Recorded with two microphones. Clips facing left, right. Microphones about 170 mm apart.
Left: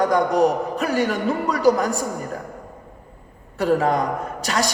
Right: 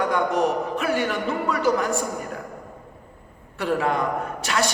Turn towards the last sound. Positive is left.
turn(degrees=40)  # may be behind; listen again after turning